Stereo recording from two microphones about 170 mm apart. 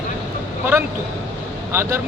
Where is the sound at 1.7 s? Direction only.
15° right (ahead or behind).